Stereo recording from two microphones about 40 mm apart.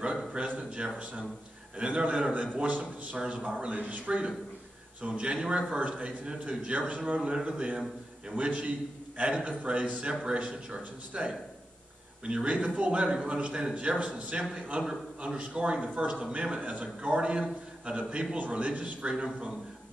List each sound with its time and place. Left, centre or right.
0.5 s a sound: right
1.8 s a man's voice: right
7.2 s a man's voice: right